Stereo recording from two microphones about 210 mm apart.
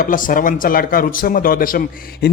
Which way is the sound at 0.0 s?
40° left (ahead or behind).